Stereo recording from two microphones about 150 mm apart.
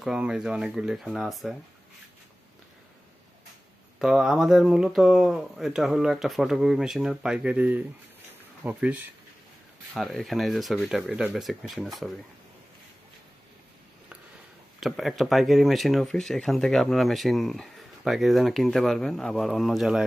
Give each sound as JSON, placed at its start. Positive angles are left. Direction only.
{"t": 0.0, "sound": "speech", "side_deg": -5}
{"t": 4.0, "sound": "speech", "side_deg": -5}
{"t": 9.9, "sound": "speech", "side_deg": 0}
{"t": 14.8, "sound": "speech", "side_deg": 0}